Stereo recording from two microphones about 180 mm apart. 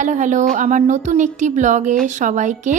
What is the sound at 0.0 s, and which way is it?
A woman's voice, 45° right (ahead or behind).